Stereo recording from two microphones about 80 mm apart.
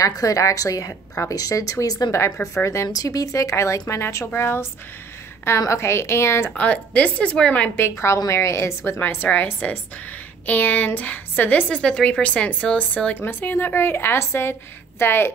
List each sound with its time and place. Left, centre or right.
0.0 s a woman's voice: left
2.0 s a woman's voice: left
2.9 s a woman's voice: left
4.3 s a woman's voice: left
6.5 s a woman's voice: centre
8.3 s a woman's voice: left
9.0 s a woman's voice: left